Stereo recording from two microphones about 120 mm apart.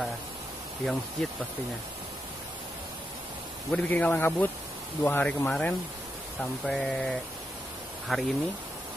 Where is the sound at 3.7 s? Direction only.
10° left (ahead or behind).